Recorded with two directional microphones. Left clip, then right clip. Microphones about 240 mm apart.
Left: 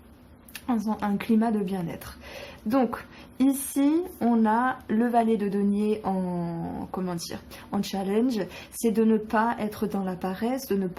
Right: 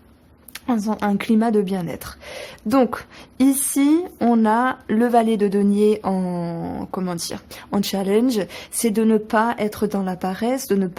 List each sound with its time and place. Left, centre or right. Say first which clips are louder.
0.5 s speech: right 6 dB; right